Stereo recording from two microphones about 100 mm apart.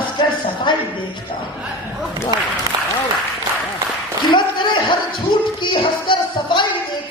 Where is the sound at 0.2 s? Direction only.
50° left (ahead or behind).